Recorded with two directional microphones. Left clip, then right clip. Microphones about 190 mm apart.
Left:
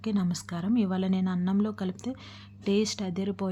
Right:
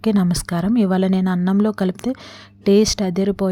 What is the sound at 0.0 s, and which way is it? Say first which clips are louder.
A woman's voice: right 12 dB; 40° right (ahead or behind).